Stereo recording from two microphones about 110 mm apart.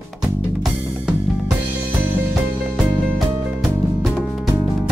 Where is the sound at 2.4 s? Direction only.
15° right (ahead or behind).